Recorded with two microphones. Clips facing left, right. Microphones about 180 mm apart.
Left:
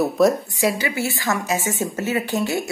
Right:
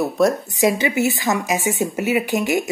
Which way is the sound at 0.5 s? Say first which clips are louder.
Right 4 dB; 20° right (ahead or behind).